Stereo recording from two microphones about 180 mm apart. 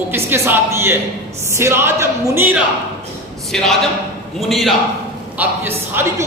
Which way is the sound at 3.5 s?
5° left (ahead or behind).